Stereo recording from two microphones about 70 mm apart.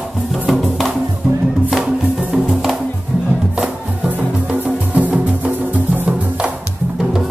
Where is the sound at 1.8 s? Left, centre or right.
Centre.